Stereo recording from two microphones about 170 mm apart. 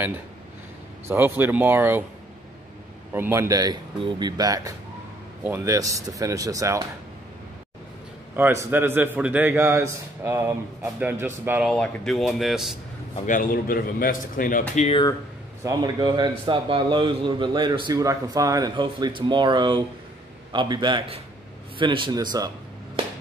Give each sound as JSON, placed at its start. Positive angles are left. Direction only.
{"t": 1.0, "sound": "a man's voice", "side_deg": -15}
{"t": 3.1, "sound": "a man's voice", "side_deg": -15}
{"t": 8.4, "sound": "a man's voice", "side_deg": -15}
{"t": 11.6, "sound": "speech", "side_deg": 5}
{"t": 13.3, "sound": "speech", "side_deg": 55}
{"t": 14.8, "sound": "speech", "side_deg": 35}
{"t": 15.6, "sound": "a man's voice", "side_deg": -20}